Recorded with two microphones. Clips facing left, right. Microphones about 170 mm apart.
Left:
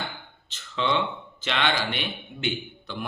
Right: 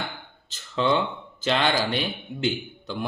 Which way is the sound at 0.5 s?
40° right (ahead or behind).